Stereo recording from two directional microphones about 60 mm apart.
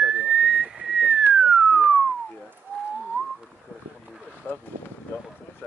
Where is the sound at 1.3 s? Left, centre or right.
Centre.